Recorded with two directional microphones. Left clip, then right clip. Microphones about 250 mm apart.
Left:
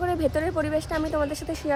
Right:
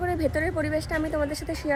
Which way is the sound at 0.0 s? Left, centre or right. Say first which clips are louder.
Left 2 dB; centre.